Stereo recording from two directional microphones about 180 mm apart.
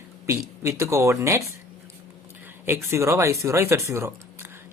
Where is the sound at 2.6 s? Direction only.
15° right (ahead or behind).